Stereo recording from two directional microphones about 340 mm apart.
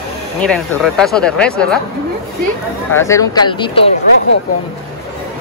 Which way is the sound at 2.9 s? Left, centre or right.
Centre.